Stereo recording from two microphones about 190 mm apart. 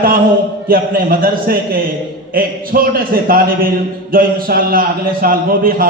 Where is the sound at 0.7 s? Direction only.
50° right (ahead or behind).